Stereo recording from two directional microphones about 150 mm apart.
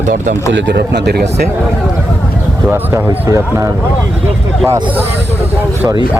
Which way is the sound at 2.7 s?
15° right (ahead or behind).